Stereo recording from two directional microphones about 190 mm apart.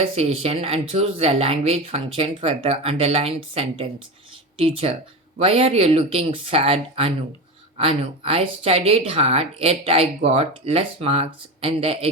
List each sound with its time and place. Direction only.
0.0 s speech: 30° right (ahead or behind)